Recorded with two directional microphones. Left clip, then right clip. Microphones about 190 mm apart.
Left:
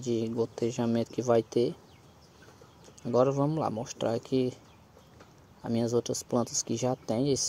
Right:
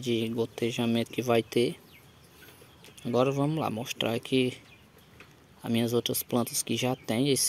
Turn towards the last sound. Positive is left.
turn(degrees=-15)  # may be behind; listen again after turning